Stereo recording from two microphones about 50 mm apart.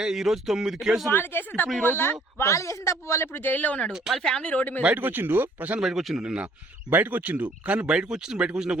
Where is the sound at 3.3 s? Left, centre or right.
Left.